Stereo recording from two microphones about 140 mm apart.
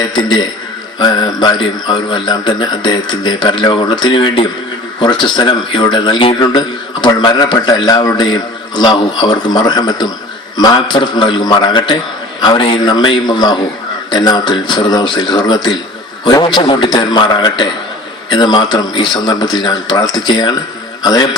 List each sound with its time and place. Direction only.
0.9 s a man's voice: 30° left (ahead or behind)